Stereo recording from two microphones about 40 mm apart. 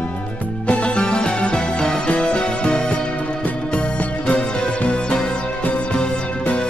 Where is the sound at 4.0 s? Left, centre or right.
Left.